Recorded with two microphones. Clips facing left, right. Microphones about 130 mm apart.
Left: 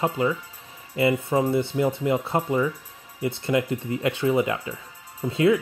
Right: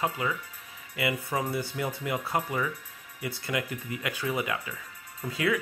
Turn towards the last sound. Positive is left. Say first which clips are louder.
# left 9 dB
turn(degrees=25)  # may be behind; listen again after turning